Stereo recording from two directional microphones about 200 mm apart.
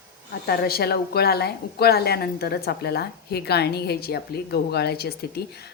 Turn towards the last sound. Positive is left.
turn(degrees=50)  # may be behind; listen again after turning